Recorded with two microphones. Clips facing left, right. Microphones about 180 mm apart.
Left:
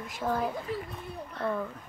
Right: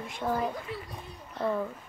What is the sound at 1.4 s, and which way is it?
Speech, 10° right (ahead or behind).